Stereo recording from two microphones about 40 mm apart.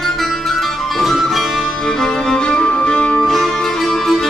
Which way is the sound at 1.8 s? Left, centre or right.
Centre.